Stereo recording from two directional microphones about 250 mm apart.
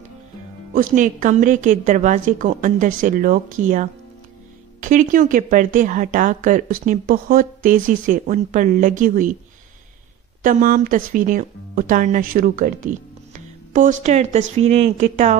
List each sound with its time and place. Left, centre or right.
0.7 s speech: right
10.4 s speech: right